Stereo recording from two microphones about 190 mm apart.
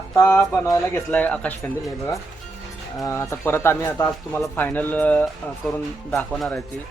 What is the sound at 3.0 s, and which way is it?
Speech, 15° left (ahead or behind).